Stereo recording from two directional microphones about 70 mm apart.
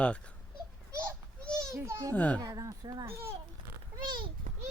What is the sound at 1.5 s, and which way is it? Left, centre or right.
Children playing, right.